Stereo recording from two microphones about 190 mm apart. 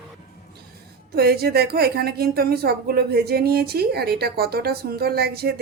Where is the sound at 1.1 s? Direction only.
55° right (ahead or behind).